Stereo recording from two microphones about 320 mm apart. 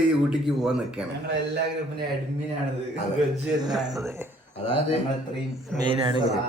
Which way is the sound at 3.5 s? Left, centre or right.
Centre.